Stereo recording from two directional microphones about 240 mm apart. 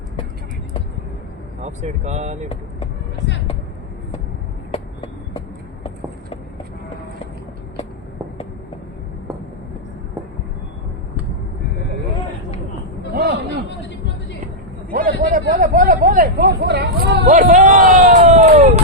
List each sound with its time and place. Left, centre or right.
1.6 s speech: right
14.9 s hubbub: right